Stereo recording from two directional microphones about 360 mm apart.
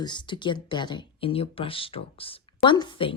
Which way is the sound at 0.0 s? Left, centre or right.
Centre.